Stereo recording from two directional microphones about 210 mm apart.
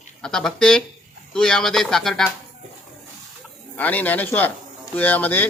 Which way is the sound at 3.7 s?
10° left (ahead or behind).